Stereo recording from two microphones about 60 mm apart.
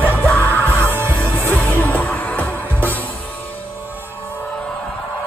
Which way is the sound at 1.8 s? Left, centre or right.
Left.